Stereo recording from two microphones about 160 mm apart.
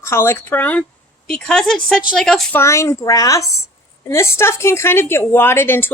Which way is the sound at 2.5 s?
15° left (ahead or behind).